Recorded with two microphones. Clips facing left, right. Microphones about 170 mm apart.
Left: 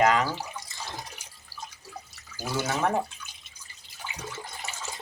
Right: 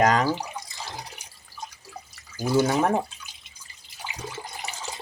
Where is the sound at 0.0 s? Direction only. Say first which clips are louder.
Right 2 dB; 40° right (ahead or behind).